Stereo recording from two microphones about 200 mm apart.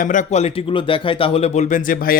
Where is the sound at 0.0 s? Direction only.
40° left (ahead or behind).